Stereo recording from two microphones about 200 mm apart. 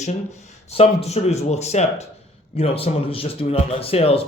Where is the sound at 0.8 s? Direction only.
30° left (ahead or behind).